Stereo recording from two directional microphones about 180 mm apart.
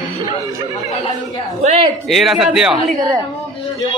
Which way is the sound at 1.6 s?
40° right (ahead or behind).